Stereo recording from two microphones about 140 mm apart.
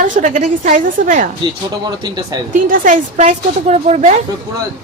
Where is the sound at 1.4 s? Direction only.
30° right (ahead or behind).